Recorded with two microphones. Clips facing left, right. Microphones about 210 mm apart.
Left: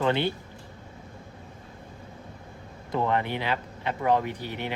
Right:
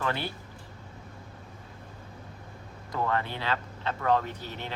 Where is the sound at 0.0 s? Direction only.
20° left (ahead or behind).